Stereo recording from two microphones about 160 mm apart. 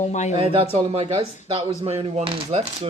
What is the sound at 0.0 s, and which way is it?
Speech, 45° left (ahead or behind).